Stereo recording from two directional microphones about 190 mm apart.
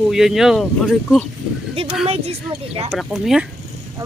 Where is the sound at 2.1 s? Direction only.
30° right (ahead or behind).